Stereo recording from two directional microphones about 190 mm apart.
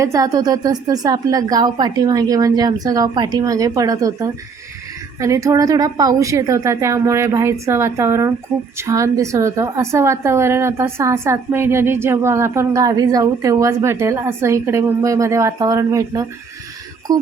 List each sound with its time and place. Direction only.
0.0 s a woman's voice: 15° right (ahead or behind)